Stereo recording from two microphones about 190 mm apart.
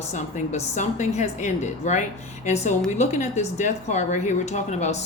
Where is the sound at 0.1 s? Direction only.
40° left (ahead or behind).